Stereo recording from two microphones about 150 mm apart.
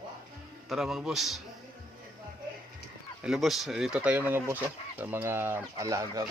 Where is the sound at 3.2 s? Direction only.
Centre (ahead or behind).